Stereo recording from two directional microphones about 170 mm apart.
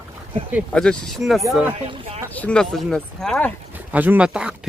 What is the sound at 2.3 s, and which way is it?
Speech, 10° left (ahead or behind).